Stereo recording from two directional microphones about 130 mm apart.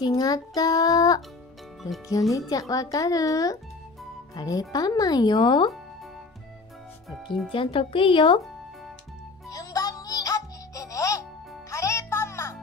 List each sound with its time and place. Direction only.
0.0 s child singing: 30° left (ahead or behind)
2.3 s child singing: 25° left (ahead or behind)
4.4 s speech: 30° left (ahead or behind)
7.5 s speech: 45° left (ahead or behind)
9.5 s music: 25° left (ahead or behind)